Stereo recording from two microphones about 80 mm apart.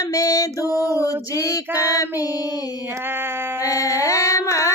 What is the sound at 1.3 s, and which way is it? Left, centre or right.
Female singing, left.